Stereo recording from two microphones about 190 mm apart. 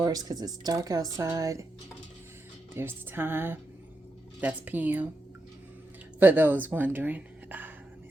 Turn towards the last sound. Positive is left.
turn(degrees=-10)  # may be behind; listen again after turning